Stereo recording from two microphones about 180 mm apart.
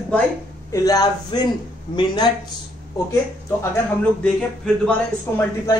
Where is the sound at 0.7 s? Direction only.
20° left (ahead or behind).